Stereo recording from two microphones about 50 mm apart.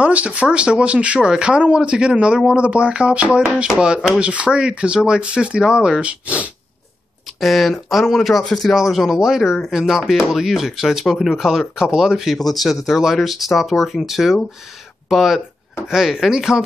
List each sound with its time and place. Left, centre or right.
0.0 s speech: right
7.3 s speech: centre